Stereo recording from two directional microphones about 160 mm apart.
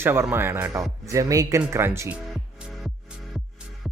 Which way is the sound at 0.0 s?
15° right (ahead or behind).